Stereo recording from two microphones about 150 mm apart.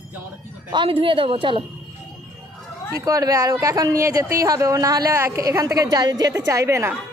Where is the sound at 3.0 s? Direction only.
20° right (ahead or behind).